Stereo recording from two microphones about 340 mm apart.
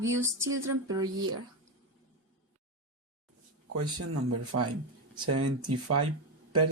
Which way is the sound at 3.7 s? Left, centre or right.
Right.